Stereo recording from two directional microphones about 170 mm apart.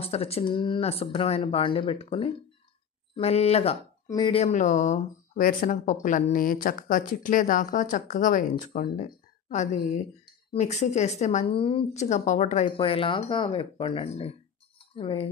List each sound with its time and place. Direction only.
0.0 s speech: 35° left (ahead or behind)
4.1 s speech: 25° left (ahead or behind)
4.4 s speech: 45° left (ahead or behind)
12.6 s speech: 35° left (ahead or behind)
14.8 s chink: 30° left (ahead or behind)